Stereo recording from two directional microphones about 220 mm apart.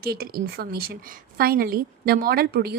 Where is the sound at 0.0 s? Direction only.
45° right (ahead or behind).